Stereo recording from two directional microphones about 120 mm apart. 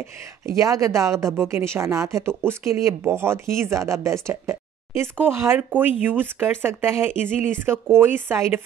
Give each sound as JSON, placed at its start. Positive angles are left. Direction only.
{"t": 0.0, "sound": "speech", "side_deg": -25}